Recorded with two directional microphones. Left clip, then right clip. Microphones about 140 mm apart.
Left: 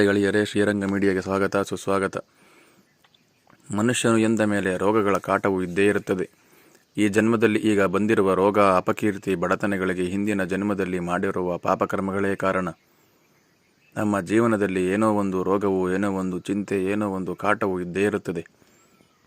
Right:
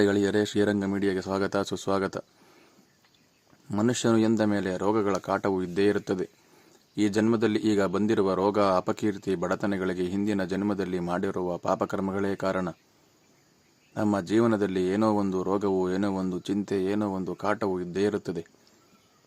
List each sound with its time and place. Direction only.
0.0 s speech: 5° left (ahead or behind)
0.9 s speech: 25° left (ahead or behind); by 2.2 s 10° left (ahead or behind)
3.7 s speech: 5° left (ahead or behind)
13.9 s speech: 10° left (ahead or behind)